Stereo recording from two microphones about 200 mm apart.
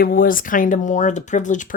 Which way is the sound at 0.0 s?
45° left (ahead or behind).